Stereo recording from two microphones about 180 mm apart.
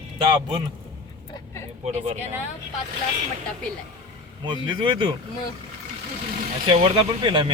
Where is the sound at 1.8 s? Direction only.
40° right (ahead or behind).